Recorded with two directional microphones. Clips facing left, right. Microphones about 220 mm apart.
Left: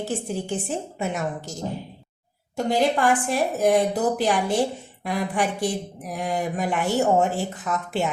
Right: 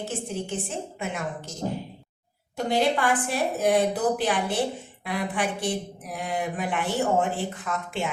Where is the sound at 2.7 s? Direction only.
45° left (ahead or behind).